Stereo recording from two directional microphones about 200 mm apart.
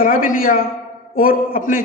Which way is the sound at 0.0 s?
45° left (ahead or behind).